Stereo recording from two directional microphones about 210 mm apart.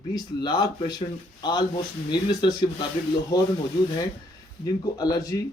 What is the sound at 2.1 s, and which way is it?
Speech, 20° left (ahead or behind).